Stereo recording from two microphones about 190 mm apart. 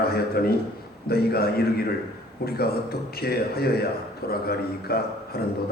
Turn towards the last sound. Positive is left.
turn(degrees=55)  # may be behind; listen again after turning